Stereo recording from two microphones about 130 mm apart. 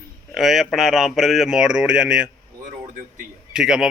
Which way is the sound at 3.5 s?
5° right (ahead or behind).